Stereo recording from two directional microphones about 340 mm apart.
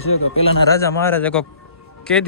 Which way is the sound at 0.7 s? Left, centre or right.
Centre.